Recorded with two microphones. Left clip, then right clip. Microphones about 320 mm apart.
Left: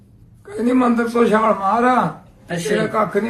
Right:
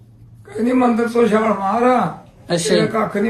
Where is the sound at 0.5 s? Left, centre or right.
Centre.